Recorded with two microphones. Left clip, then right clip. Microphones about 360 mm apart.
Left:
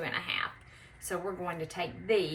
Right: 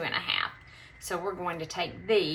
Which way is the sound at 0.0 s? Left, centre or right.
Centre.